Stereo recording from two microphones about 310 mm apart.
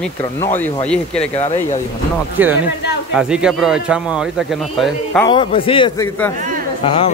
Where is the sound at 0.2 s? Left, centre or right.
Centre.